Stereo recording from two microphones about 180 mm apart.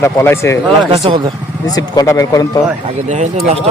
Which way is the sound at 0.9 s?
25° right (ahead or behind).